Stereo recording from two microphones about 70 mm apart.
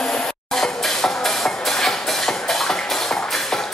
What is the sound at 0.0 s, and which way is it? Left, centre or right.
Music, centre.